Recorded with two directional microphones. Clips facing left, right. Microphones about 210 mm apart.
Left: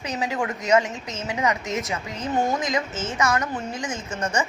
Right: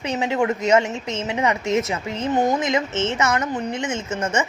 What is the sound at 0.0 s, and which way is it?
A woman's voice, 25° right (ahead or behind).